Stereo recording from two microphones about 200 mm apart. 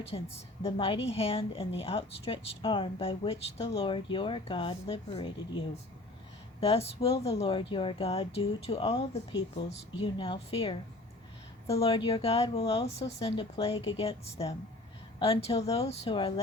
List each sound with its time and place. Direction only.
0.0 s a woman's voice: 30° left (ahead or behind)
9.3 s speech: 65° left (ahead or behind)
10.0 s a woman's voice: 25° left (ahead or behind)